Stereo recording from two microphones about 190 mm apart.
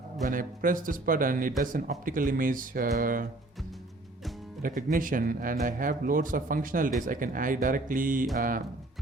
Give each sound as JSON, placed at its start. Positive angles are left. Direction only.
{"t": 0.3, "sound": "speech", "side_deg": -45}
{"t": 4.6, "sound": "speech", "side_deg": -45}